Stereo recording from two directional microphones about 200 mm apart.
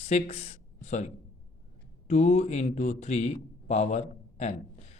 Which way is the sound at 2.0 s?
35° left (ahead or behind).